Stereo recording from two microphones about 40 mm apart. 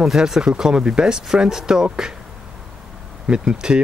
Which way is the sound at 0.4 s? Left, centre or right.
Centre.